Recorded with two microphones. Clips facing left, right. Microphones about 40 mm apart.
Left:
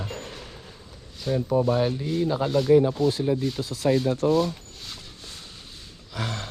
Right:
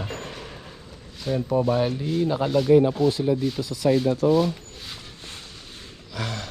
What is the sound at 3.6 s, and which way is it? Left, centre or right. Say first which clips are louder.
Speech: right 2 dB; left.